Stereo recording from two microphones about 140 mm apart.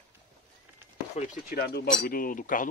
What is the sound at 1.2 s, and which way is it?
Speech, 70° left (ahead or behind).